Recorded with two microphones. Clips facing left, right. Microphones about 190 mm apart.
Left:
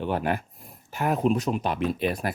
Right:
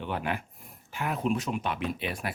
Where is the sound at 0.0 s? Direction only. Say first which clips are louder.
Left 6 dB; 40° left (ahead or behind).